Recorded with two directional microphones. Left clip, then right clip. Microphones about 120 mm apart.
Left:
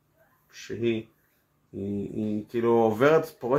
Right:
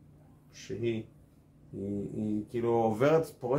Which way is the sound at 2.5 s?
10° left (ahead or behind).